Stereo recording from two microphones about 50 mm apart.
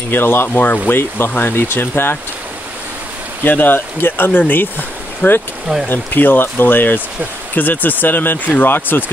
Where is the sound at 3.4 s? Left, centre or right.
Left.